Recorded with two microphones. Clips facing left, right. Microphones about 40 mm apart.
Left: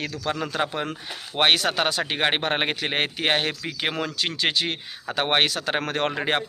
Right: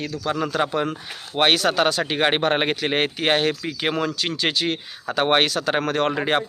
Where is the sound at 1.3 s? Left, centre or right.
Centre.